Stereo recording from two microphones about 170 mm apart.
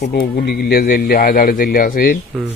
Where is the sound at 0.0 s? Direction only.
65° left (ahead or behind).